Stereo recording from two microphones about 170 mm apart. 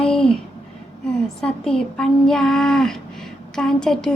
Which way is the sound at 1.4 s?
5° left (ahead or behind).